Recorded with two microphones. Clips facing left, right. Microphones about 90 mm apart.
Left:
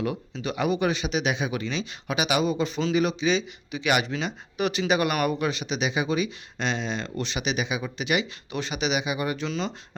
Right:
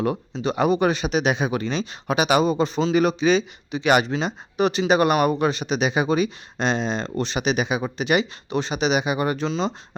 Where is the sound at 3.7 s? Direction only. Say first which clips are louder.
Right 6 dB; 35° right (ahead or behind).